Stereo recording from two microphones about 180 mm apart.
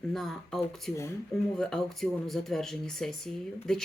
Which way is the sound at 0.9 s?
15° left (ahead or behind).